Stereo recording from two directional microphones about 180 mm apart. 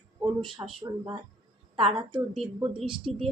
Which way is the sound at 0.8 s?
25° right (ahead or behind).